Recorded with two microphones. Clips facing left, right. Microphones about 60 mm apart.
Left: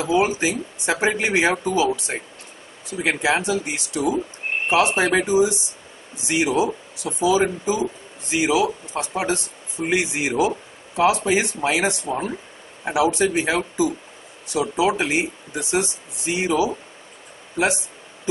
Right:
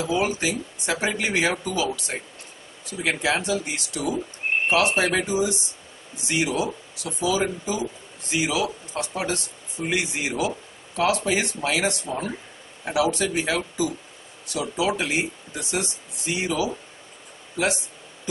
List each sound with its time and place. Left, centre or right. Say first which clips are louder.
0.0 s speech: left 4 dB; centre